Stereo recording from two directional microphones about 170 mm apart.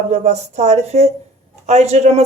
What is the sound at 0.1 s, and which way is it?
A woman's voice, 40° right (ahead or behind).